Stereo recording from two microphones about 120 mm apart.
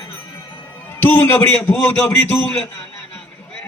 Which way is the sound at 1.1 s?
20° left (ahead or behind).